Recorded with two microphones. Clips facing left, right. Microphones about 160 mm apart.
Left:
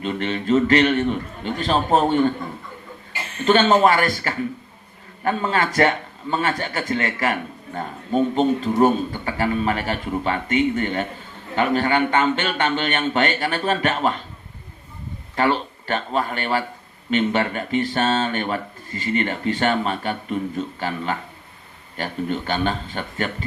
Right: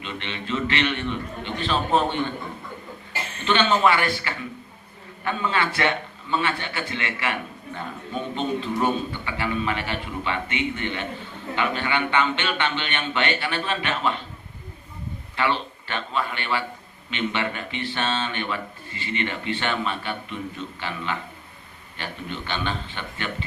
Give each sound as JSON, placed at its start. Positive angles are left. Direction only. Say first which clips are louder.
{"t": 0.0, "sound": "a man's voice", "louder": "left 9 dB", "side_deg": 40}
{"t": 3.4, "sound": "a man's voice", "louder": "left 5 dB", "side_deg": 40}
{"t": 15.4, "sound": "a man's voice", "louder": "left 5 dB", "side_deg": 40}